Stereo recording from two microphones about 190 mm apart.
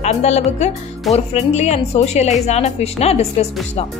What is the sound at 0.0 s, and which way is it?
A woman's voice, 35° left (ahead or behind).